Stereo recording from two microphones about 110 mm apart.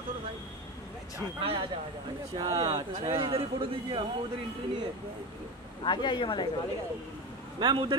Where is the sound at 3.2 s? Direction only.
60° right (ahead or behind).